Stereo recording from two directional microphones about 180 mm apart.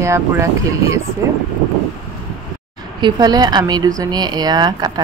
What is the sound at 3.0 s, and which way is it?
Speech, 20° right (ahead or behind).